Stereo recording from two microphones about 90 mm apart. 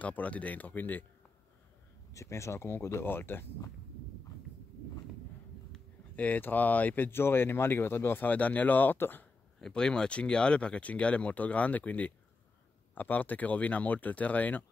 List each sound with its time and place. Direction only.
0.0 s speech: 15° left (ahead or behind)
2.1 s speech: 35° left (ahead or behind)
6.1 s speech: 20° left (ahead or behind)
9.6 s speech: 10° left (ahead or behind)